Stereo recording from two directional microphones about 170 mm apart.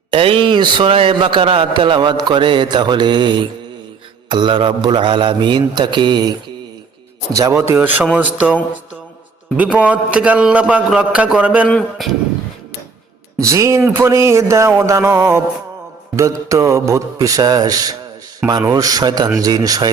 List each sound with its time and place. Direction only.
0.1 s a man's voice: 30° right (ahead or behind)
7.3 s a man's voice: 15° right (ahead or behind)
9.6 s a man's voice: 10° right (ahead or behind)
11.7 s a man's voice: 5° left (ahead or behind)
13.4 s a man's voice: 20° right (ahead or behind)